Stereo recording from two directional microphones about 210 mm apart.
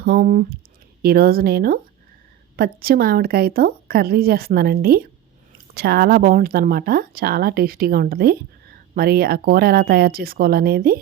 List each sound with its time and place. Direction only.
0.0 s speech: 45° right (ahead or behind)